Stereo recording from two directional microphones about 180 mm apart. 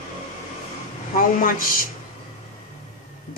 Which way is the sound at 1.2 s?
50° left (ahead or behind).